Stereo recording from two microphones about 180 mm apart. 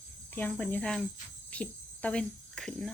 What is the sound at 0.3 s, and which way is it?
Speech, 10° left (ahead or behind).